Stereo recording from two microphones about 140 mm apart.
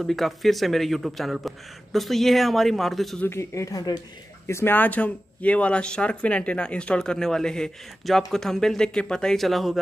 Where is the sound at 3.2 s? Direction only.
20° left (ahead or behind).